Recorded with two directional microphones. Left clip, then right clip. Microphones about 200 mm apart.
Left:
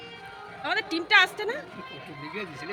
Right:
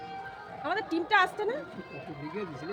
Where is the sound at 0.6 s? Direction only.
30° right (ahead or behind).